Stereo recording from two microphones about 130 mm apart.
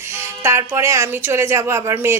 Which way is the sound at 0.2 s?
20° right (ahead or behind).